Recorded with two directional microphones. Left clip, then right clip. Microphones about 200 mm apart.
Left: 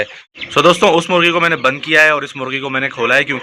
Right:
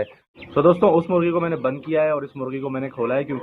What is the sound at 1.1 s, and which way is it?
Speech, 10° left (ahead or behind).